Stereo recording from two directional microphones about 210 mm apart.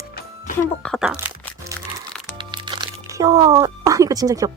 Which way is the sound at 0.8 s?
Centre (ahead or behind).